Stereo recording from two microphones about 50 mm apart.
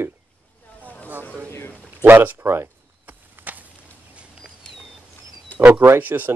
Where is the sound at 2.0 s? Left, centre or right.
Right.